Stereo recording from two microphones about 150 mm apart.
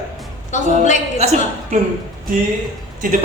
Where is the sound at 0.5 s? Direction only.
55° left (ahead or behind).